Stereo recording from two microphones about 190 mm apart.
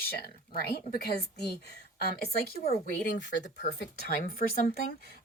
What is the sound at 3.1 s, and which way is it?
A woman's voice, 65° left (ahead or behind).